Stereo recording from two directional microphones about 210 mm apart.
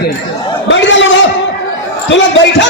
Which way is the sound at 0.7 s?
60° left (ahead or behind).